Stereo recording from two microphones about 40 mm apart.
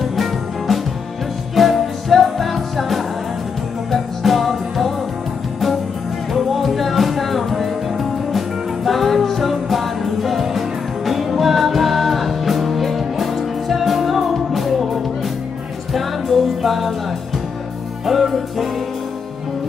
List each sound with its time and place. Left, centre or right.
0.0 s music: centre
6.3 s music: centre
15.9 s music: centre
18.0 s music: centre